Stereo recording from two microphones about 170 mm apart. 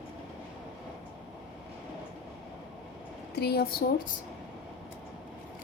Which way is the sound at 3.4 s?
65° left (ahead or behind).